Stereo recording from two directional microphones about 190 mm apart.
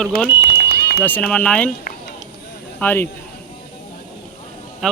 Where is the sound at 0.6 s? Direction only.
60° left (ahead or behind).